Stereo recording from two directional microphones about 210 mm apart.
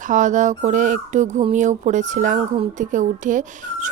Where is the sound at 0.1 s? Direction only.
35° right (ahead or behind).